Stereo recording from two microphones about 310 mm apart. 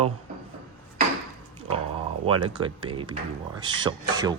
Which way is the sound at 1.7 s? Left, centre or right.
Centre.